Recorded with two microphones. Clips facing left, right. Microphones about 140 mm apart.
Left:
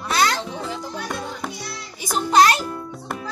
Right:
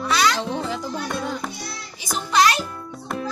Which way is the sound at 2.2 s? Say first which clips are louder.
Left 3 dB; 40° left (ahead or behind).